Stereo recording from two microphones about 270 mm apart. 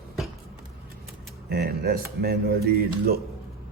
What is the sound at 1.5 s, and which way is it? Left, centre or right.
A man's voice, right.